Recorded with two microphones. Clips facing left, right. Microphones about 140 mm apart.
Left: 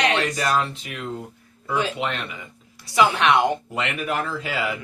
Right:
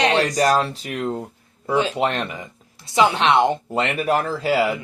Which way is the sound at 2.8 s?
25° right (ahead or behind).